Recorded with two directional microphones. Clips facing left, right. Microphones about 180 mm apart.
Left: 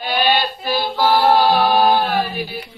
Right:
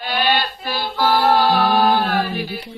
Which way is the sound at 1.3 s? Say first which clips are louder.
Left 1 dB; 25° left (ahead or behind).